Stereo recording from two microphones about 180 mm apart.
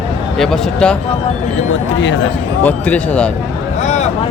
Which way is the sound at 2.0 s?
90° left.